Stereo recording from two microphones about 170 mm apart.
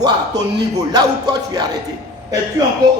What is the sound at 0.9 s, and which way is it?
Speech, 25° right (ahead or behind).